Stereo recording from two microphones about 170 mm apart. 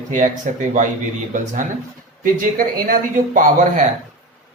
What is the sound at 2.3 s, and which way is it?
Speech, 55° right (ahead or behind).